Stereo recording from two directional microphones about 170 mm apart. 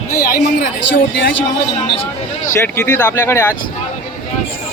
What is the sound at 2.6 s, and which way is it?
Speech, 10° left (ahead or behind).